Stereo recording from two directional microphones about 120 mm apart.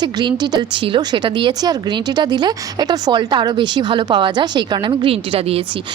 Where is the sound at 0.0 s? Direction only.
35° right (ahead or behind); by 5.6 s 50° right (ahead or behind).